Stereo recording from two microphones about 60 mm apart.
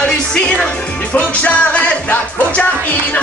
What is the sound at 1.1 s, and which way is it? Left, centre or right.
Music, left.